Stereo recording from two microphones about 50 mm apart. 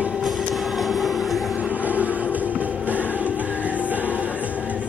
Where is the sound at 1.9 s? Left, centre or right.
Right.